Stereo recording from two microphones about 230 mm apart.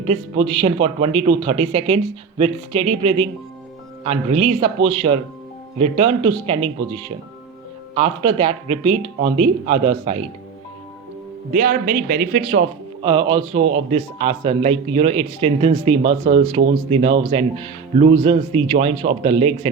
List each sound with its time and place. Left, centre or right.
0.0 s speech: right
11.5 s a man's voice: right